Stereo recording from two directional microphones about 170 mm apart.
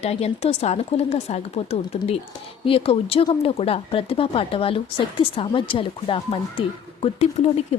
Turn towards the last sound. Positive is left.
turn(degrees=40)  # may be behind; listen again after turning